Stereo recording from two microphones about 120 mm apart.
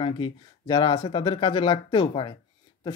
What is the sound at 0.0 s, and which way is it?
Speech, 40° left (ahead or behind).